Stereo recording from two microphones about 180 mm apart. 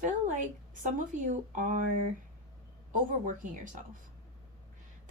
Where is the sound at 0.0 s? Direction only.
45° right (ahead or behind).